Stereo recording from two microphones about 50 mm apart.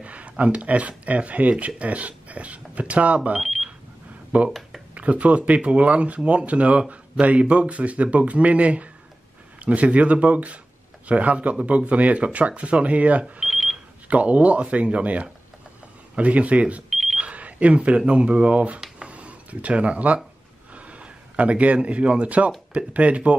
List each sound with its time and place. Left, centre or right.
0.0 s speech: right
3.3 s alarm clock: centre
4.5 s speech: centre
4.9 s speech: right
13.2 s a sound: centre
14.0 s speech: right
16.9 s alarm clock: centre
17.2 s speech: right
19.0 s a sound: right
22.1 s speech: right